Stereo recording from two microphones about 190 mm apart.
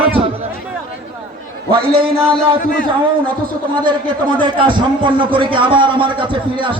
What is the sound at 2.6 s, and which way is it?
Speech, 50° left (ahead or behind).